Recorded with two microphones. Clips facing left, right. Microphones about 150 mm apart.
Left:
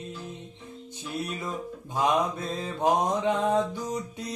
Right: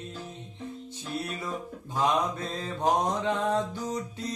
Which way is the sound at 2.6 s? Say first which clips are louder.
Left 1 dB; 15° left (ahead or behind).